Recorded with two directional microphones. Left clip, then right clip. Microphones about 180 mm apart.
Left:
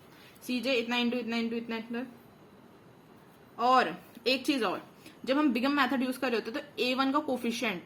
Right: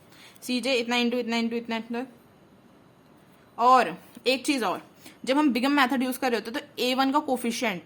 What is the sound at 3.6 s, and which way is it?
A woman's voice, 40° right (ahead or behind).